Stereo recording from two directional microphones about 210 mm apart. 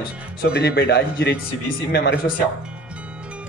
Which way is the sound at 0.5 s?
50° left (ahead or behind).